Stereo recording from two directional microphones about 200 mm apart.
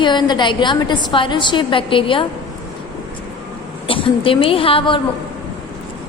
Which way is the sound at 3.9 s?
25° left (ahead or behind).